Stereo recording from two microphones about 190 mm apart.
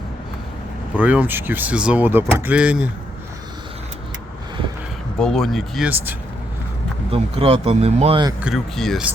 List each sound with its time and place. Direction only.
0.9 s speech: 10° right (ahead or behind)
5.1 s speech: centre (ahead or behind)
7.1 s speech: 30° right (ahead or behind)
8.4 s speech: centre (ahead or behind)